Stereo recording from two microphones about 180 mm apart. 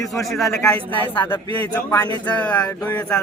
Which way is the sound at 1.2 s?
25° left (ahead or behind).